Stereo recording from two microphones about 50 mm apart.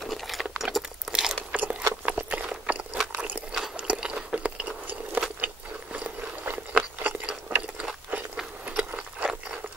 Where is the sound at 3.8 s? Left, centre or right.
Centre.